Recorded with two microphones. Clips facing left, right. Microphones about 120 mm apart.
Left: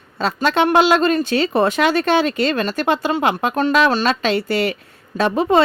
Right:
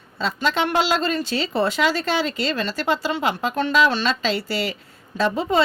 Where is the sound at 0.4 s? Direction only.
60° left (ahead or behind).